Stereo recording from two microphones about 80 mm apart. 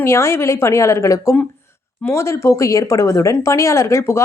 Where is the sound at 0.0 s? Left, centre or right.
Left.